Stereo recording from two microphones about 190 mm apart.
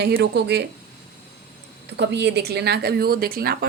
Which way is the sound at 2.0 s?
65° right (ahead or behind).